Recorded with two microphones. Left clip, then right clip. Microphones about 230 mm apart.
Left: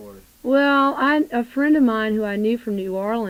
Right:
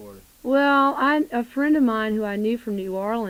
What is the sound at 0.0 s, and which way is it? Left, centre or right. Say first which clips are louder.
Speech: left 3 dB; left.